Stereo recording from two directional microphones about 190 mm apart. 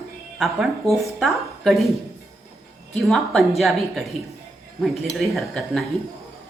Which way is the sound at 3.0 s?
Centre (ahead or behind).